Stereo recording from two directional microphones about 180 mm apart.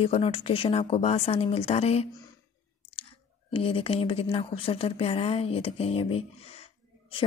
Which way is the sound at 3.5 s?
30° left (ahead or behind).